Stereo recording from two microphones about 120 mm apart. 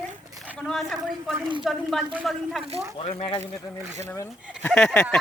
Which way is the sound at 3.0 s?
55° left (ahead or behind).